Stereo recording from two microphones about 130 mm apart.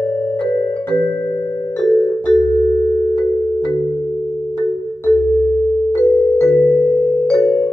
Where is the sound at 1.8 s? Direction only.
15° left (ahead or behind).